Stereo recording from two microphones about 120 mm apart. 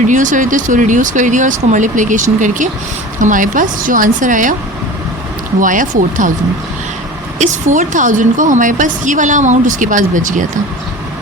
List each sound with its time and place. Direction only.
0.1 s a woman's voice: 90° right
5.5 s a woman's voice: 90° right
7.3 s a woman's voice: 90° right